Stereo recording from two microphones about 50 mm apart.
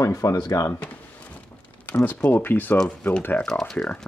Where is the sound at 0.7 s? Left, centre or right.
Left.